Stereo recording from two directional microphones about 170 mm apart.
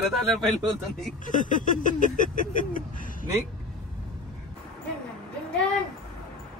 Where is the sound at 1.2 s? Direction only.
50° left (ahead or behind).